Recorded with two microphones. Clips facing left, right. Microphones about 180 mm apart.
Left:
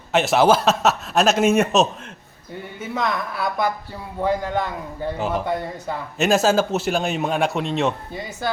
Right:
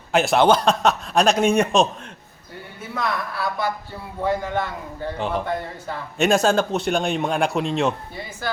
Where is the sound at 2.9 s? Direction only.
20° left (ahead or behind).